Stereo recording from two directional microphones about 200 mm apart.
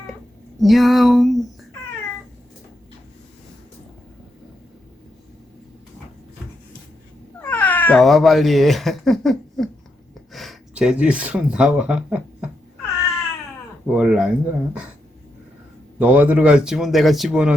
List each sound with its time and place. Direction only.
0.6 s speech: centre (ahead or behind)
7.4 s speech: 10° left (ahead or behind)
13.8 s speech: 5° right (ahead or behind)
16.0 s speech: 10° right (ahead or behind)